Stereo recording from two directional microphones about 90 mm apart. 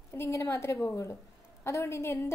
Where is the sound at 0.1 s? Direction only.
30° left (ahead or behind).